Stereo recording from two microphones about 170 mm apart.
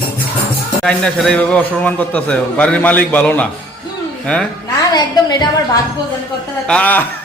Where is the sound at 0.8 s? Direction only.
5° left (ahead or behind).